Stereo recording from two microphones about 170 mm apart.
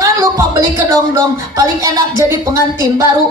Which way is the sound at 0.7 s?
20° right (ahead or behind).